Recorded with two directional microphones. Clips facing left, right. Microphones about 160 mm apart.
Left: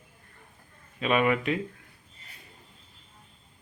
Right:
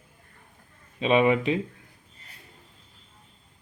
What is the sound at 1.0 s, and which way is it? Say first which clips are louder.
Speech: right 4 dB; 25° right (ahead or behind).